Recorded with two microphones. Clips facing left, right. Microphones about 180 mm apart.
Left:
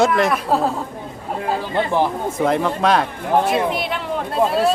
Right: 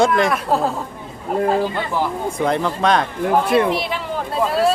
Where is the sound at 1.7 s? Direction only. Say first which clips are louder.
Left 4 dB; 20° left (ahead or behind).